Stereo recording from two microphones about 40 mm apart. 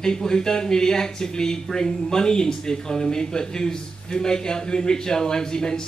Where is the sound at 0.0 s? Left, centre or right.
Centre.